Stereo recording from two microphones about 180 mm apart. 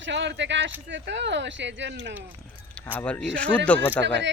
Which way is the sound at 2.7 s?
5° left (ahead or behind).